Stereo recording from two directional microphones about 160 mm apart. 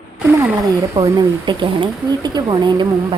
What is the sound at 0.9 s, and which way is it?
A woman's voice, 25° right (ahead or behind).